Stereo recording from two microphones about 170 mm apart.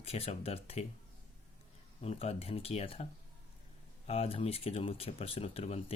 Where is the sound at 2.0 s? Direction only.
35° left (ahead or behind).